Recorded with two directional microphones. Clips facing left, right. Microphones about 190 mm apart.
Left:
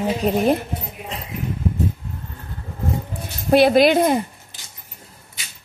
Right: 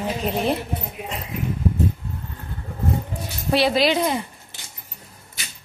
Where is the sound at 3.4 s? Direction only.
50° left (ahead or behind).